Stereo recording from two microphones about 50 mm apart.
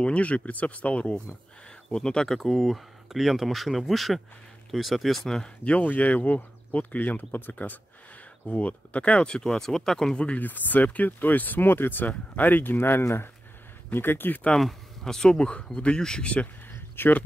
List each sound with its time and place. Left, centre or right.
0.0 s speech: left
2.0 s speech: centre
5.6 s speech: left
9.4 s speech: centre
10.1 s speech: left
10.4 s speech: left
12.7 s speech: left
13.9 s speech: left
15.0 s speech: centre
16.7 s a sound: left